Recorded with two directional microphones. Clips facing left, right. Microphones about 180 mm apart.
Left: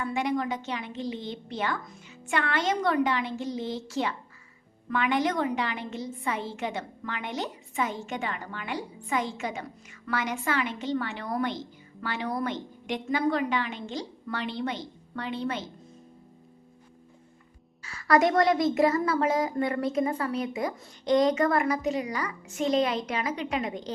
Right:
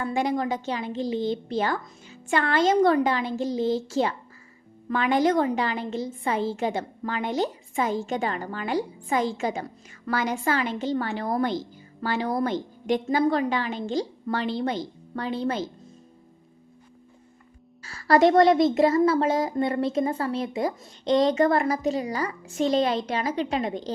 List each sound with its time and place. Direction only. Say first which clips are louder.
0.0 s a woman's voice: right 3 dB; 35° right (ahead or behind)
17.8 s a woman's voice: right 4 dB; 35° right (ahead or behind)